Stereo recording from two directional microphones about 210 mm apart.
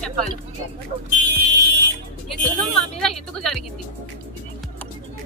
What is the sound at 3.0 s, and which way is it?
Speech, centre (ahead or behind).